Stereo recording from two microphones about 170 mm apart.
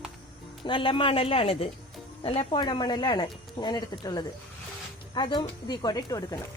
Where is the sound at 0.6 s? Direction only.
30° left (ahead or behind).